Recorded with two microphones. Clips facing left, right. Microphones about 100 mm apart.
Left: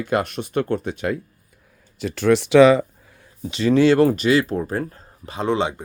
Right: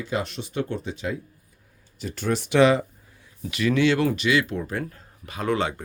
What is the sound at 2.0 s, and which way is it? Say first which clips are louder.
Speech: left 9 dB; 90° left.